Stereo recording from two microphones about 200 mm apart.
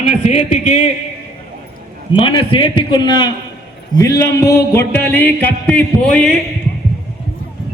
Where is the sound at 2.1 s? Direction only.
25° left (ahead or behind).